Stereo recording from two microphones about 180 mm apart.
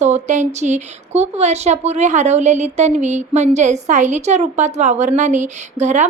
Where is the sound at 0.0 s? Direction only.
40° right (ahead or behind).